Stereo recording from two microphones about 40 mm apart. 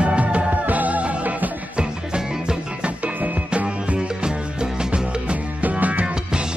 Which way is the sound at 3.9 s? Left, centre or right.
Right.